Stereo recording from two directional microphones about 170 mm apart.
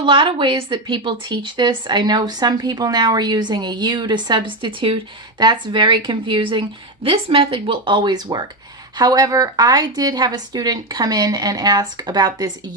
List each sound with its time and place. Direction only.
0.0 s a woman's voice: 30° right (ahead or behind)